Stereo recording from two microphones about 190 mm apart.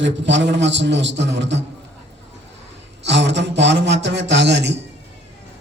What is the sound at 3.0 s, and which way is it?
A man's voice, 65° right (ahead or behind).